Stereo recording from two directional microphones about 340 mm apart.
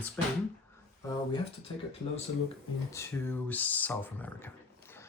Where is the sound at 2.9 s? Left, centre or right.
Centre.